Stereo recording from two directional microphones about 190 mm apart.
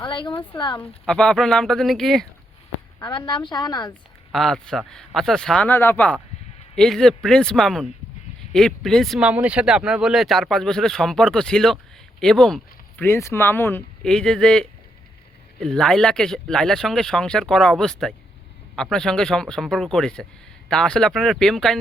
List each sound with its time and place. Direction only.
0.0 s a sound: 25° left (ahead or behind)
0.5 s a woman's voice: 25° left (ahead or behind)
1.0 s speech: 5° left (ahead or behind)
3.0 s a woman's voice: 25° left (ahead or behind)
4.3 s speech: centre (ahead or behind)